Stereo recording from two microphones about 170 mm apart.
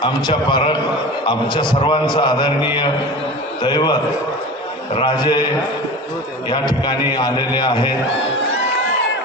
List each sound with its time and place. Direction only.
0.0 s a man's voice: 25° left (ahead or behind)
3.6 s a man's voice: 25° left (ahead or behind)
6.9 s a man's voice: 25° left (ahead or behind)